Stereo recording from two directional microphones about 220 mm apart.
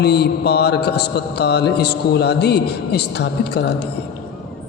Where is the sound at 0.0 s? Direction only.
50° left (ahead or behind).